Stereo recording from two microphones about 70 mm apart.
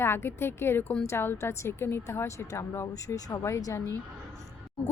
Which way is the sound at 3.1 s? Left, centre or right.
Left.